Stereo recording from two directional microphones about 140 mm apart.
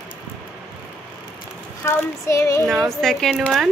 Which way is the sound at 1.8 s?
20° left (ahead or behind).